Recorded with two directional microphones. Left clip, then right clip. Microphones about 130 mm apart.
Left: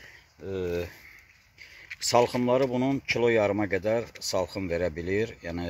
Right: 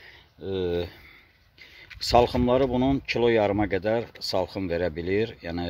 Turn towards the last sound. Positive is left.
turn(degrees=-20)  # may be behind; listen again after turning